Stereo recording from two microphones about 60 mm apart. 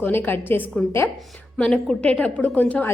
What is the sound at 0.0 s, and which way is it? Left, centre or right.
A woman's voice, left.